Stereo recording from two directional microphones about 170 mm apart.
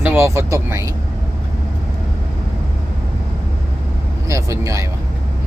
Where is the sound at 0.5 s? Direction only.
15° right (ahead or behind).